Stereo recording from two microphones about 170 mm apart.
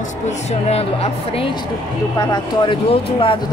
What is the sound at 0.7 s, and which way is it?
Speech, 35° left (ahead or behind).